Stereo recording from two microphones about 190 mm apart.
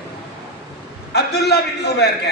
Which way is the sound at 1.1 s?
60° left (ahead or behind).